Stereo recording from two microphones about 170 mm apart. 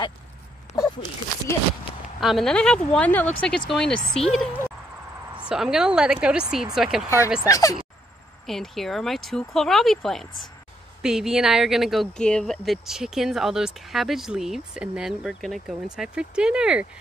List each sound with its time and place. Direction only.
0.7 s a sound: 25° left (ahead or behind)
2.1 s speech: centre (ahead or behind)
7.4 s speech: 20° left (ahead or behind)
8.5 s speech: centre (ahead or behind)